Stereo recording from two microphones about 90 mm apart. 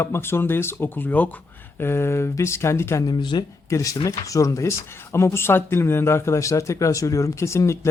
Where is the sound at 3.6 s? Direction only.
35° left (ahead or behind).